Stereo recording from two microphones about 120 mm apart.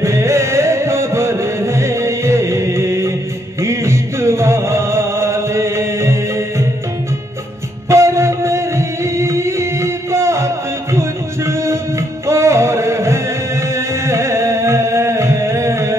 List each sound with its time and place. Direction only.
0.0 s music: 25° right (ahead or behind)
7.9 s music: 25° right (ahead or behind)